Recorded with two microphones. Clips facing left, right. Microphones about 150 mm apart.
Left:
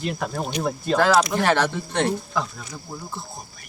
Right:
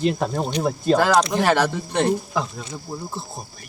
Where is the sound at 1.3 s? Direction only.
15° right (ahead or behind).